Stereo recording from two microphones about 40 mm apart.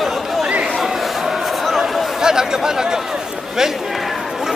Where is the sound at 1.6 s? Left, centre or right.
Centre.